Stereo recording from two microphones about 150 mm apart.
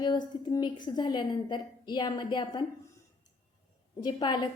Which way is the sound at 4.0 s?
30° left (ahead or behind).